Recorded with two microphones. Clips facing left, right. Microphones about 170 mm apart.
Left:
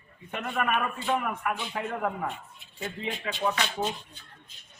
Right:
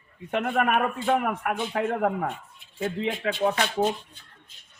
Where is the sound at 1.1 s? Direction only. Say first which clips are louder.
Right 4 dB; 80° right.